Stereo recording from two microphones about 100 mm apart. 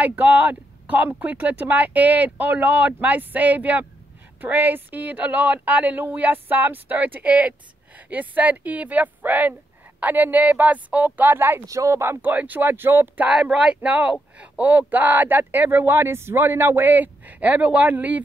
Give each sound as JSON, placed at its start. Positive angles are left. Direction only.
{"t": 0.0, "sound": "speech", "side_deg": -15}
{"t": 11.6, "sound": "speech", "side_deg": -30}
{"t": 13.3, "sound": "speech", "side_deg": -10}